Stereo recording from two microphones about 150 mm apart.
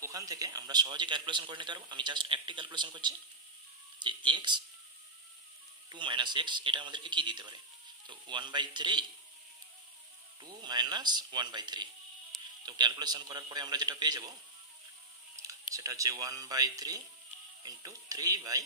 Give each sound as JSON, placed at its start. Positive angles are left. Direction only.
{"t": 0.0, "sound": "a man's voice", "side_deg": -25}
{"t": 5.9, "sound": "a man's voice", "side_deg": -30}
{"t": 10.4, "sound": "a man's voice", "side_deg": -30}
{"t": 15.7, "sound": "a man's voice", "side_deg": -20}